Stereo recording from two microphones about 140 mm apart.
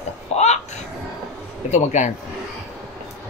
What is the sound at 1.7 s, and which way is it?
Speech, 60° left (ahead or behind).